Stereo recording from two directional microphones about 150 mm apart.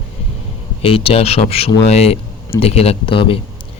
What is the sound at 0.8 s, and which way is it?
A man's voice, 40° left (ahead or behind).